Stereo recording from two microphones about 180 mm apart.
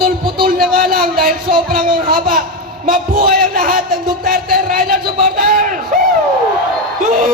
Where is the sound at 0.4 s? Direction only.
50° right (ahead or behind).